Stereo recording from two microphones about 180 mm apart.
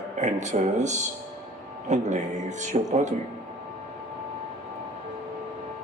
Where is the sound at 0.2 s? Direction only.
40° right (ahead or behind).